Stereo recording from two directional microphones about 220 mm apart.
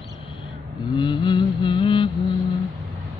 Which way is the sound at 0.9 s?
20° left (ahead or behind).